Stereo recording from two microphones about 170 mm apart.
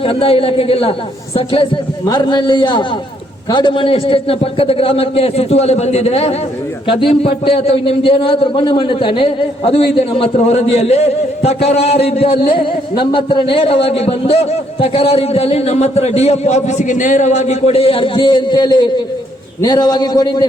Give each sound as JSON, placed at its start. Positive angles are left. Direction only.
{"t": 0.0, "sound": "a man's voice", "side_deg": 30}